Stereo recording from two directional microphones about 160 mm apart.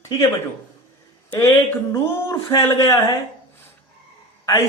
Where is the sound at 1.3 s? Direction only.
15° left (ahead or behind).